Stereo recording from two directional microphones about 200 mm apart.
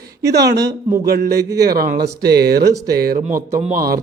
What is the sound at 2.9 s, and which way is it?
Speech, 50° right (ahead or behind).